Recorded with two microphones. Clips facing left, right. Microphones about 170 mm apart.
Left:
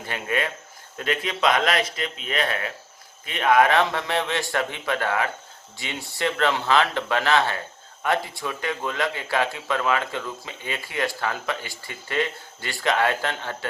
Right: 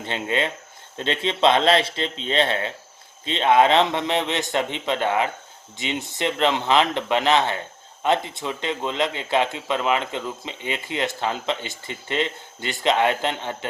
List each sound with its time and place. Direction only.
0.0 s speech: 25° right (ahead or behind)